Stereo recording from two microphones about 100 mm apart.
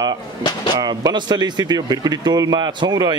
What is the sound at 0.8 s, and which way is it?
A man's voice, 40° right (ahead or behind).